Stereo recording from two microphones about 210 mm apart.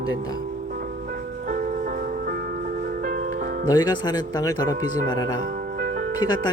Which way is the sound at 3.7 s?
20° left (ahead or behind).